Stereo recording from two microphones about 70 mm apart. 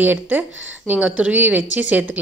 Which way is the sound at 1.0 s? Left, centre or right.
Centre.